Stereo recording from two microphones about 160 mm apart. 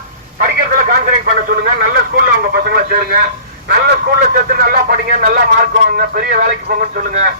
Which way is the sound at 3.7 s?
65° right (ahead or behind).